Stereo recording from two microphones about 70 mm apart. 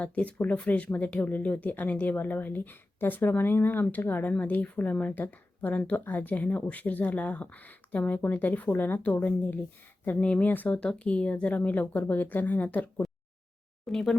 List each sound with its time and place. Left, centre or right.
0.0 s speech: centre
13.8 s speech: centre